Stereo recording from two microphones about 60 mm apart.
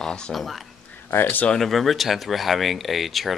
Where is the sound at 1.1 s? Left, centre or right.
Left.